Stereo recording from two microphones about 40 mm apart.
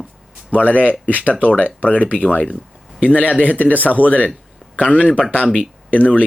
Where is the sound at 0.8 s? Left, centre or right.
Right.